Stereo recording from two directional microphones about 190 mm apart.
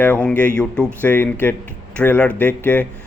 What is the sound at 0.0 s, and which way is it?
Speech, 10° left (ahead or behind).